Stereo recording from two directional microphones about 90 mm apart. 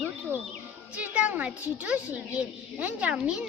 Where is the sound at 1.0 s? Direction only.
15° right (ahead or behind).